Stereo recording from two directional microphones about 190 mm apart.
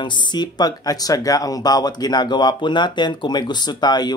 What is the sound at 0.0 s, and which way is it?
Speech, 25° left (ahead or behind).